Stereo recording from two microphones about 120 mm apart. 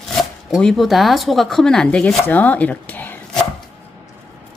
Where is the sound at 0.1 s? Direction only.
Centre (ahead or behind).